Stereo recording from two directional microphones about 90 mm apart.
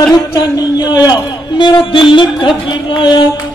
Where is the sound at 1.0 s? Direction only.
55° left (ahead or behind).